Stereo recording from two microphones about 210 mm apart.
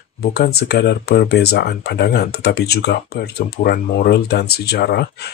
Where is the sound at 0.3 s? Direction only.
50° left (ahead or behind).